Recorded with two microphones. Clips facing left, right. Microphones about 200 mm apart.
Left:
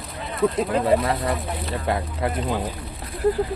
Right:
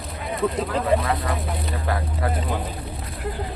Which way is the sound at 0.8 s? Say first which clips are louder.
Even; 30° left (ahead or behind).